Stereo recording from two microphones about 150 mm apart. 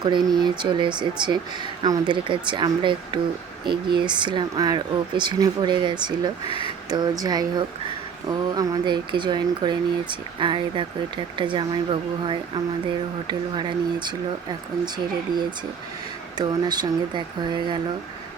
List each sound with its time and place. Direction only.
0.0 s speech: 30° right (ahead or behind)
16.4 s speech: 30° right (ahead or behind)